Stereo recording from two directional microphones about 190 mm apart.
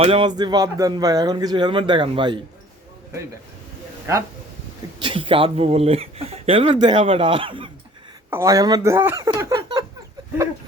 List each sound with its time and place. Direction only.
0.0 s speech: 30° right (ahead or behind)
4.1 s speech: 15° right (ahead or behind)
5.0 s speech: 25° right (ahead or behind)
8.3 s speech: 15° right (ahead or behind)